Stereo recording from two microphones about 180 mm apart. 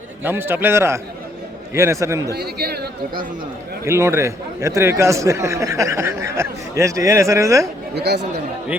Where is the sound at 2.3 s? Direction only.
60° right (ahead or behind).